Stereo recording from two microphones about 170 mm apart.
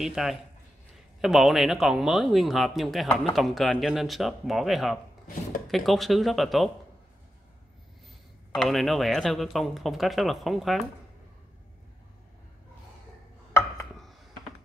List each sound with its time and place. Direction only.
0.0 s speech: centre (ahead or behind)
8.5 s speech: centre (ahead or behind)
13.5 s chopping: 15° left (ahead or behind)